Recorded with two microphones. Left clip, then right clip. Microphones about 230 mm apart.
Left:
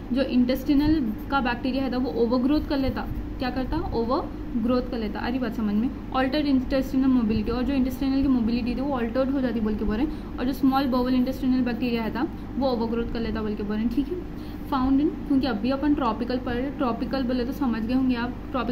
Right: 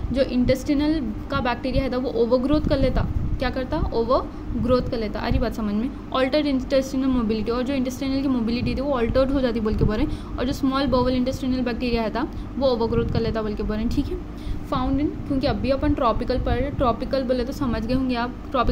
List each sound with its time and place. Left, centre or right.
0.1 s a woman's voice: right